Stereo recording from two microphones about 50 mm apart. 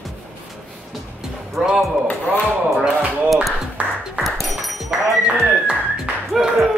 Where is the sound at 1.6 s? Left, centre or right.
Centre.